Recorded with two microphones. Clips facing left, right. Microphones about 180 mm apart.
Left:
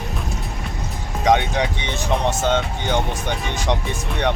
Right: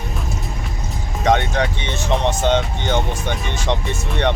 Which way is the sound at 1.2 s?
15° left (ahead or behind).